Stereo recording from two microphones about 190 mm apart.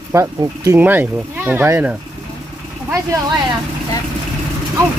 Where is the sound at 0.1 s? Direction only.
15° right (ahead or behind).